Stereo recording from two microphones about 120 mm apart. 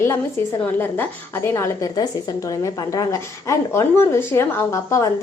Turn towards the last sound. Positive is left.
turn(degrees=25)  # may be behind; listen again after turning